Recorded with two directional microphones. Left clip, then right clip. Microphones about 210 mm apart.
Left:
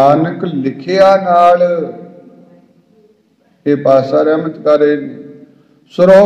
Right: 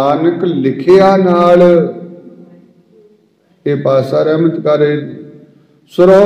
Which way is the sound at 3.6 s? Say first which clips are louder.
Left 2 dB; 35° right (ahead or behind).